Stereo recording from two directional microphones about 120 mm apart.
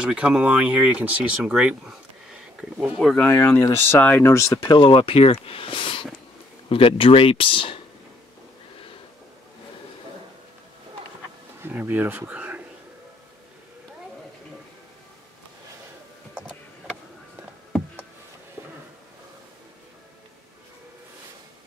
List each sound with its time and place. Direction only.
0.0 s speech: 10° right (ahead or behind)
3.0 s speech: centre (ahead or behind)
3.3 s speech: 20° left (ahead or behind)
4.6 s speech: 45° left (ahead or behind)
11.6 s speech: 15° right (ahead or behind)